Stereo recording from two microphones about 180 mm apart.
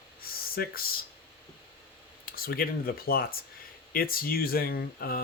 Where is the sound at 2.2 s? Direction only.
55° left (ahead or behind).